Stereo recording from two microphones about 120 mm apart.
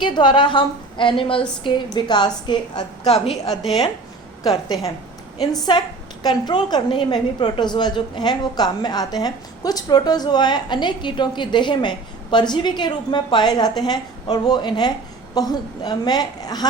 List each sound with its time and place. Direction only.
0.0 s a woman's voice: 40° left (ahead or behind)
4.4 s a woman's voice: 30° left (ahead or behind)